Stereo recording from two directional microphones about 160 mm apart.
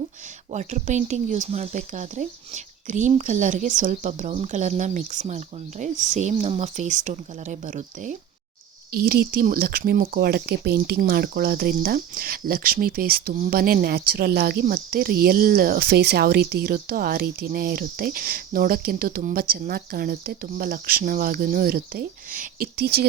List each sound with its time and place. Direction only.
0.5 s speech: 50° right (ahead or behind)
8.9 s speech: 65° right (ahead or behind)